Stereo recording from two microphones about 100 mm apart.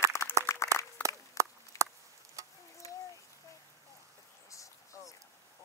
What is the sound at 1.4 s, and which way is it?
Chop, 30° right (ahead or behind).